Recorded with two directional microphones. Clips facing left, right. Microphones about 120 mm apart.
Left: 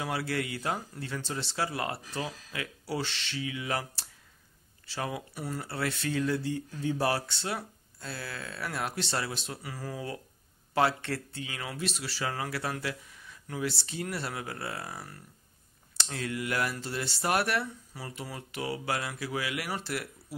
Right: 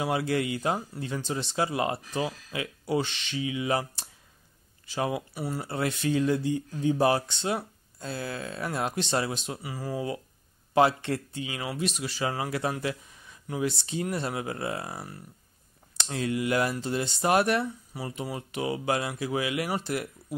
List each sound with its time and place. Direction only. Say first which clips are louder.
0.0 s speech: right 5 dB; 20° right (ahead or behind)
5.6 s speech: right 4 dB; 20° right (ahead or behind)